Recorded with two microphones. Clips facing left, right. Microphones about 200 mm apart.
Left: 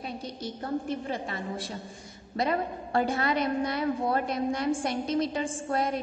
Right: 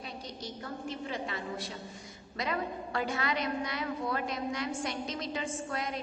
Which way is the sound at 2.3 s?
35° left (ahead or behind).